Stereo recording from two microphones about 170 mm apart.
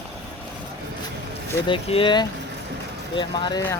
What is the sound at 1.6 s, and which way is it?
Speech, 30° left (ahead or behind).